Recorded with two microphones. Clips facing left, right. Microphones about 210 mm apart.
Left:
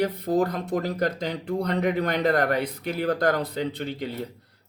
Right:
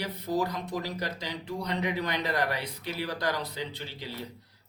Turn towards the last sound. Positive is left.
turn(degrees=55)  # may be behind; listen again after turning